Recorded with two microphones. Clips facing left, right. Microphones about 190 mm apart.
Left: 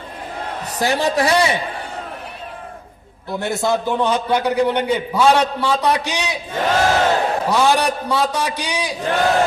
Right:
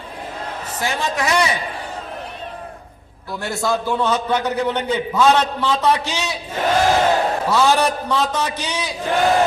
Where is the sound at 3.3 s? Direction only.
20° left (ahead or behind).